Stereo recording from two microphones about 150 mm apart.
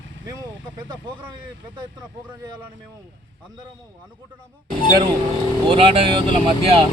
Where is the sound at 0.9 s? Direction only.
30° right (ahead or behind).